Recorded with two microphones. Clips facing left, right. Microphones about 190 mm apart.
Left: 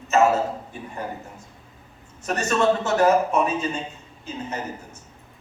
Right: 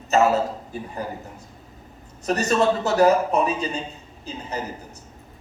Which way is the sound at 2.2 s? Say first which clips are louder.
Right 1 dB; 35° right (ahead or behind).